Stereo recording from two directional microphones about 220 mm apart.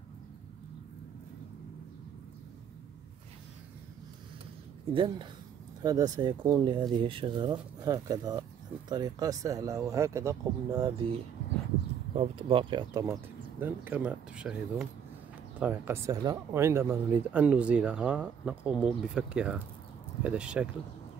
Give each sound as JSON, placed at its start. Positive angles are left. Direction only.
{"t": 4.9, "sound": "speech", "side_deg": -20}
{"t": 12.2, "sound": "speech", "side_deg": -25}